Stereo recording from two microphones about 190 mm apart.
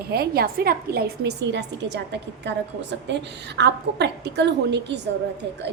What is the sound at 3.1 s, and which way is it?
A woman's voice, 65° right (ahead or behind).